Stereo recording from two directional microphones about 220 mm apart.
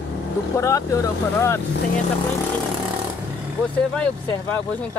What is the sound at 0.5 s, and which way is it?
Speech, 15° left (ahead or behind).